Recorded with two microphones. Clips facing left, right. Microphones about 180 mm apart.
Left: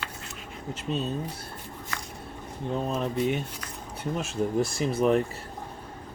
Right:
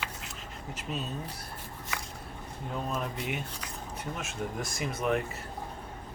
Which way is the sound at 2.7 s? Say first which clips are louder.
Left 6 dB; 30° left (ahead or behind).